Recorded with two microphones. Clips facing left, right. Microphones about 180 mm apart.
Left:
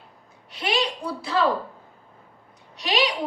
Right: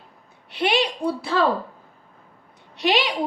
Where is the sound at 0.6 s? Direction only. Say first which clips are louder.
Right 4 dB; 60° right (ahead or behind).